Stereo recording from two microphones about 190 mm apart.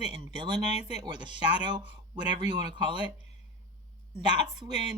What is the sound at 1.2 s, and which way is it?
Speech, 25° right (ahead or behind).